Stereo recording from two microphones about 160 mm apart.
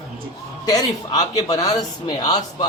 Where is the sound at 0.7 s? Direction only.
20° left (ahead or behind).